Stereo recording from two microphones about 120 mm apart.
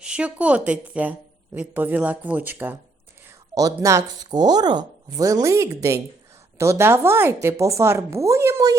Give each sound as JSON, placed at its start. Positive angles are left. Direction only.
{"t": 0.0, "sound": "speech", "side_deg": -10}
{"t": 3.2, "sound": "speech", "side_deg": -30}